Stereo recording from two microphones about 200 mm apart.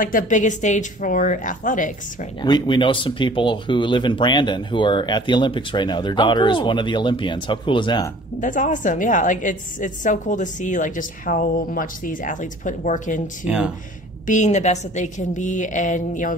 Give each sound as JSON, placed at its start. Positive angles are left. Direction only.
{"t": 0.0, "sound": "a woman's voice", "side_deg": 40}
{"t": 2.4, "sound": "speech", "side_deg": 25}
{"t": 8.4, "sound": "a woman's voice", "side_deg": 40}
{"t": 13.4, "sound": "speech", "side_deg": -5}
{"t": 14.2, "sound": "a woman's voice", "side_deg": 35}